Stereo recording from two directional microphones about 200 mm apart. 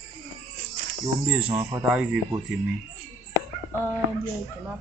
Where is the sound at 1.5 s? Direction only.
10° right (ahead or behind).